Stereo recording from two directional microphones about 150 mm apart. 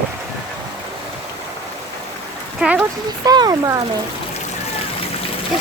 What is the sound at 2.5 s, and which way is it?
Speech, 5° right (ahead or behind).